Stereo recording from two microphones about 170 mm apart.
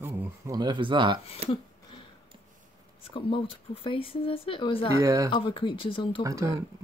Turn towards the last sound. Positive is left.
turn(degrees=-20)  # may be behind; listen again after turning